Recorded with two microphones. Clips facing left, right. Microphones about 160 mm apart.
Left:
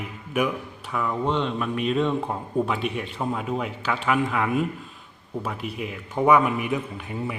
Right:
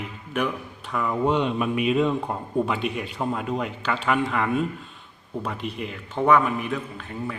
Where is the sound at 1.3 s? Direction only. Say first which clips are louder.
Right 2 dB; 10° right (ahead or behind).